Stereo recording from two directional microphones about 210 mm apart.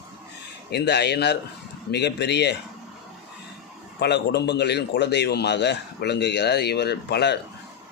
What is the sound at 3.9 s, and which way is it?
A man's voice, 50° left (ahead or behind).